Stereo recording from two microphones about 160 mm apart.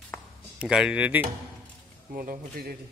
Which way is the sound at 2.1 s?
65° right (ahead or behind).